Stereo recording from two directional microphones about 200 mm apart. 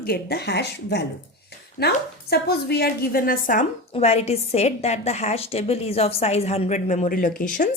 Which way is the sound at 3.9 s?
30° left (ahead or behind).